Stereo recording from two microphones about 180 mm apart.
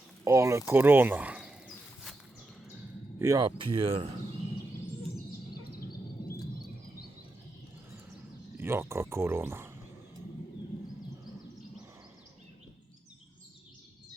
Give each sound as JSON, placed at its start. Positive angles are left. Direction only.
{"t": 0.3, "sound": "speech", "side_deg": -15}
{"t": 0.7, "sound": "a sound", "side_deg": -10}
{"t": 3.2, "sound": "speech", "side_deg": -20}
{"t": 5.7, "sound": "bird", "side_deg": 55}
{"t": 8.5, "sound": "speech", "side_deg": -15}